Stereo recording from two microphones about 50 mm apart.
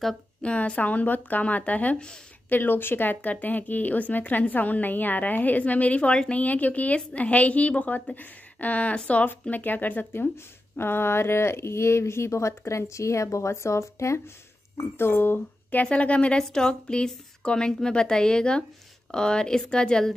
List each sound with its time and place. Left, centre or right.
0.4 s a woman's voice: left
2.5 s speech: left
3.2 s a woman's voice: left
9.5 s a woman's voice: left
10.3 s speech: left
15.0 s speech: left
15.7 s a woman's voice: left